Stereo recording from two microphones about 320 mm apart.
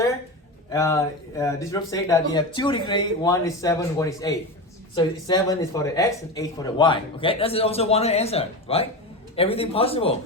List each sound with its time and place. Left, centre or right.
0.7 s speech: centre